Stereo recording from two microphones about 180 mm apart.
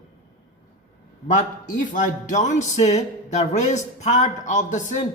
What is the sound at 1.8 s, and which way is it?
A man's voice, 45° left (ahead or behind).